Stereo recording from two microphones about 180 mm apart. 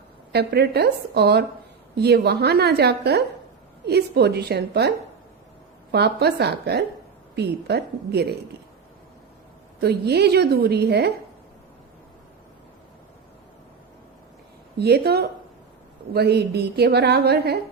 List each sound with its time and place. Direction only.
0.3 s a woman's voice: 65° right (ahead or behind)
9.8 s a woman's voice: 65° right (ahead or behind)
14.8 s a woman's voice: 65° right (ahead or behind)